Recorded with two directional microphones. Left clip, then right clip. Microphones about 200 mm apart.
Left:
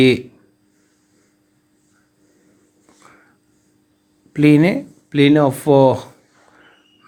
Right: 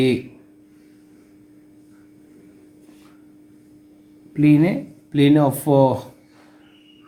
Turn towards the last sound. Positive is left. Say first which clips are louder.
# left 4 dB
turn(degrees=30)  # may be behind; listen again after turning